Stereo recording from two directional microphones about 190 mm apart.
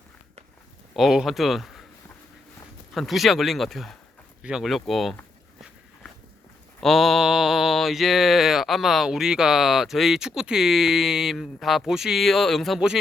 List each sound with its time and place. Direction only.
0.9 s mantra: centre (ahead or behind)
2.9 s mantra: centre (ahead or behind)
6.8 s mantra: centre (ahead or behind)